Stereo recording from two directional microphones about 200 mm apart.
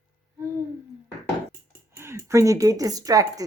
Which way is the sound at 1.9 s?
10° right (ahead or behind).